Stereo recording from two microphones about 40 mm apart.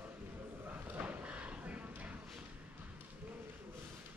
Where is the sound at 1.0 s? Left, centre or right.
Right.